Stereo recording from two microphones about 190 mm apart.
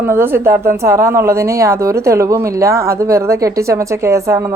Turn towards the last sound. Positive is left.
turn(degrees=-15)  # may be behind; listen again after turning